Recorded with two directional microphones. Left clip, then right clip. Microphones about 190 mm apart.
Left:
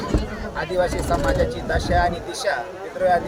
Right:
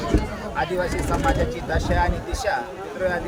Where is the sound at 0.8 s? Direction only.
10° left (ahead or behind).